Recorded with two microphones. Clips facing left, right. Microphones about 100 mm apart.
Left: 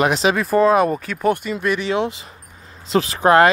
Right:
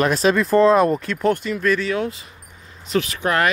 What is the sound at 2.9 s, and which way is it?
Speech, 30° left (ahead or behind).